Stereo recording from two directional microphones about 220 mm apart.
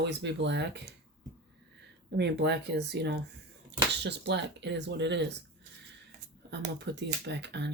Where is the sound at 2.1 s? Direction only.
50° right (ahead or behind).